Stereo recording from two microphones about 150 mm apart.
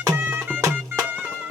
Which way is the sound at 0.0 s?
15° right (ahead or behind).